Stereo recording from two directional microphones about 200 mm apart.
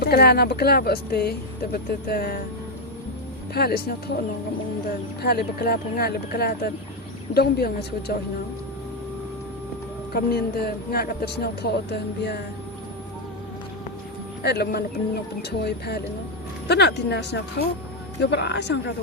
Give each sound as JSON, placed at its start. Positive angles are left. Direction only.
{"t": 0.0, "sound": "speech", "side_deg": 50}
{"t": 3.5, "sound": "speech", "side_deg": 50}
{"t": 5.2, "sound": "speech", "side_deg": 50}
{"t": 10.1, "sound": "speech", "side_deg": 50}
{"t": 14.4, "sound": "speech", "side_deg": 55}